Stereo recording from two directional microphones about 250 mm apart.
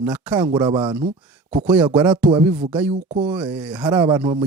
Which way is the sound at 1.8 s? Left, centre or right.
Centre.